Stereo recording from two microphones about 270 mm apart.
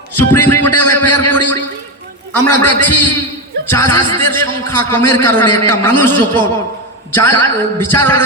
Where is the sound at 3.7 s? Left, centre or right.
Centre.